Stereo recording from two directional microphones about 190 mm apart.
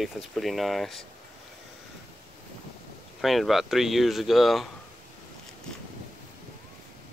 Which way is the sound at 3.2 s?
Centre (ahead or behind).